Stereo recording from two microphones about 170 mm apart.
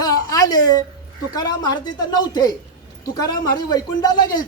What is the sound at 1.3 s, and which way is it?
Speech, 20° left (ahead or behind).